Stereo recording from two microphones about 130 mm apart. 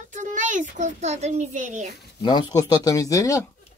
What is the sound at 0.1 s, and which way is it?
A child's voice, 70° right (ahead or behind).